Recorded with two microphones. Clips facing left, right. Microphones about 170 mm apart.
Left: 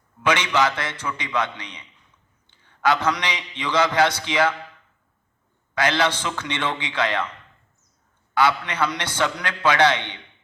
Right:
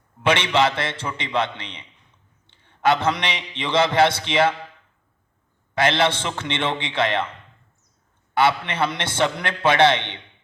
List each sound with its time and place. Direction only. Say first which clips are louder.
0.2 s a man's voice: right 2 dB; 25° right (ahead or behind)
2.5 s a sound: right 2 dB; 25° right (ahead or behind)
3.6 s a man's voice: right 2 dB; 25° right (ahead or behind)
5.7 s a man's voice: right 2 dB; 25° right (ahead or behind)
8.4 s a man's voice: right 1 dB; 25° right (ahead or behind)